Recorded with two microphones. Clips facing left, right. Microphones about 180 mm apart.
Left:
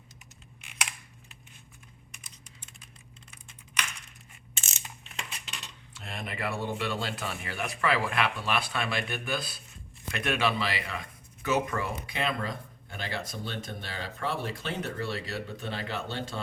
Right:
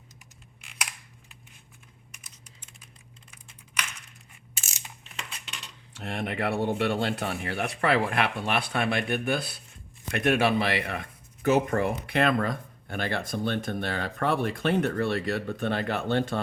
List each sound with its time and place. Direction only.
5.5 s cutlery: centre (ahead or behind)
6.0 s speech: 70° right (ahead or behind)